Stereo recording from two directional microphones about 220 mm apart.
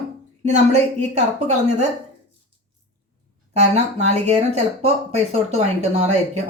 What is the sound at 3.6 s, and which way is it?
Speech, 30° right (ahead or behind).